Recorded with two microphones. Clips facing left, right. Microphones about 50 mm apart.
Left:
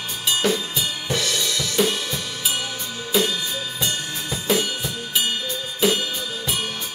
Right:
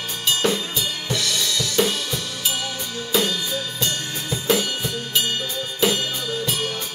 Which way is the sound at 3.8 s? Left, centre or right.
Centre.